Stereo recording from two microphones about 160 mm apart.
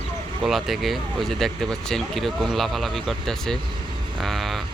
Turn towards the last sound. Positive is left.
turn(degrees=0)  # may be behind; listen again after turning